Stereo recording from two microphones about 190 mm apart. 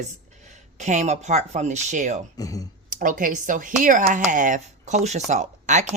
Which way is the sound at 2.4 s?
20° left (ahead or behind).